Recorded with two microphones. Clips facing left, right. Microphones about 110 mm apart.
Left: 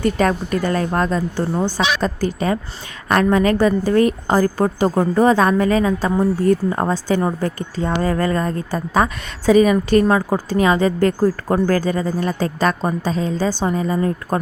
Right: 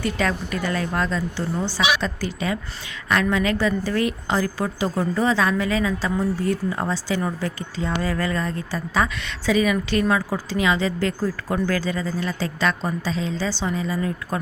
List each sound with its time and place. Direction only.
0.0 s speech: 45° left (ahead or behind)